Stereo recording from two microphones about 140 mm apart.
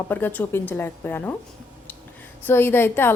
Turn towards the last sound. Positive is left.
turn(degrees=15)  # may be behind; listen again after turning